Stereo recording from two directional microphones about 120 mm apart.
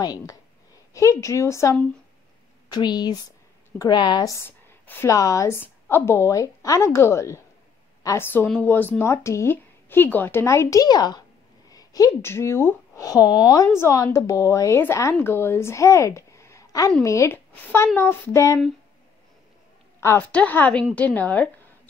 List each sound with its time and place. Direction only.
0.0 s a woman's voice: 35° left (ahead or behind)
2.7 s a woman's voice: 35° left (ahead or behind)
20.0 s a woman's voice: 25° left (ahead or behind)